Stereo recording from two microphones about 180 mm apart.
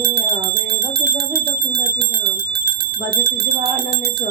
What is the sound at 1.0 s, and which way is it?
Bicycle bell, 60° right (ahead or behind).